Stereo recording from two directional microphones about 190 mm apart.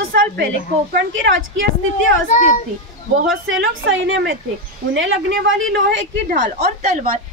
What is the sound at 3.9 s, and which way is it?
A woman's voice, 90° right.